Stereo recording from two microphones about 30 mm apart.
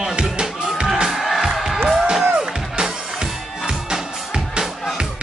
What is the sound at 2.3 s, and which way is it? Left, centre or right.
Music, right.